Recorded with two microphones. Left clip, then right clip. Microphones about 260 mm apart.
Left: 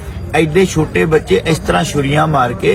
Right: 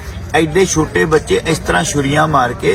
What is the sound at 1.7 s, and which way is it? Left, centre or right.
Speech, centre.